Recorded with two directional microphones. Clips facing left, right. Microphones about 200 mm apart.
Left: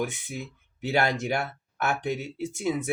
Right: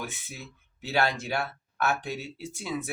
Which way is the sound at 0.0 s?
20° left (ahead or behind).